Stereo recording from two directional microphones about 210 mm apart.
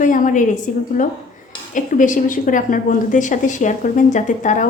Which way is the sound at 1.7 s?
40° left (ahead or behind).